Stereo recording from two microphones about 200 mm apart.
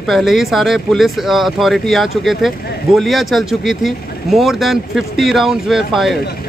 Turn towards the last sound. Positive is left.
turn(degrees=55)  # may be behind; listen again after turning